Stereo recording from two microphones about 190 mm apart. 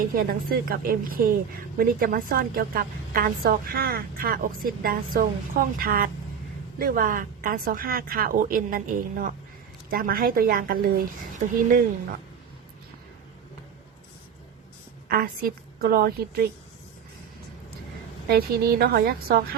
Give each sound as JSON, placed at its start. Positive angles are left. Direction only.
{"t": 0.0, "sound": "a woman's voice", "side_deg": -50}
{"t": 15.1, "sound": "a woman's voice", "side_deg": -50}
{"t": 18.3, "sound": "a woman's voice", "side_deg": -55}